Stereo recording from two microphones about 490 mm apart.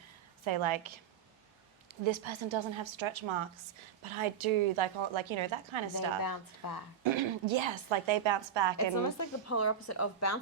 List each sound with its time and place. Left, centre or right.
0.4 s a woman's voice: right
6.2 s a woman's voice: left
7.0 s a woman's voice: right
9.0 s a woman's voice: left